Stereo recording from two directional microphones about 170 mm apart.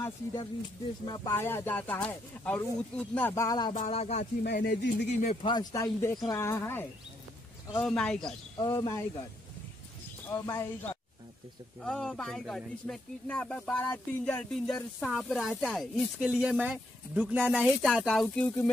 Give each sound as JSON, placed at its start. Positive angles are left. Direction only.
{"t": 0.0, "sound": "speech", "side_deg": 20}
{"t": 1.3, "sound": "speech", "side_deg": 15}
{"t": 3.9, "sound": "speech", "side_deg": 40}
{"t": 4.6, "sound": "speech", "side_deg": 55}
{"t": 5.2, "sound": "speech", "side_deg": 35}
{"t": 8.5, "sound": "speech", "side_deg": 25}
{"t": 10.4, "sound": "speech", "side_deg": 15}
{"t": 11.8, "sound": "speech", "side_deg": 5}